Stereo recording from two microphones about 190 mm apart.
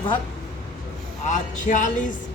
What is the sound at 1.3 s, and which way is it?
Speech, 40° left (ahead or behind).